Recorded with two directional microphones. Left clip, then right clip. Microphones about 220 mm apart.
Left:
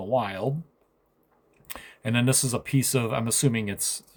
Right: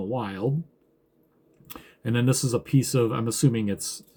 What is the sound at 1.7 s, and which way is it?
Speech, 45° left (ahead or behind).